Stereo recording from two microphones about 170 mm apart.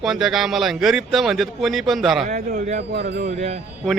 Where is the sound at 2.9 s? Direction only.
80° right.